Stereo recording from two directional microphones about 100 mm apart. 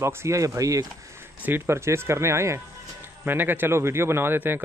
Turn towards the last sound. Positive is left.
turn(degrees=-20)  # may be behind; listen again after turning